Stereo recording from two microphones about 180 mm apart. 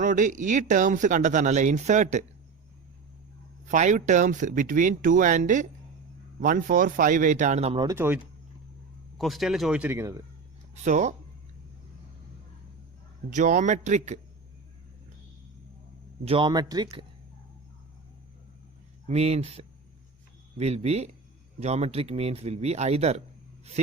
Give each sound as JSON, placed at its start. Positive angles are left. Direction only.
{"t": 0.0, "sound": "speech", "side_deg": -45}
{"t": 3.7, "sound": "speech", "side_deg": -45}
{"t": 7.8, "sound": "speech", "side_deg": -15}
{"t": 9.1, "sound": "speech", "side_deg": 0}
{"t": 10.8, "sound": "speech", "side_deg": -40}
{"t": 13.3, "sound": "speech", "side_deg": -45}
{"t": 16.2, "sound": "speech", "side_deg": -30}
{"t": 19.0, "sound": "speech", "side_deg": -35}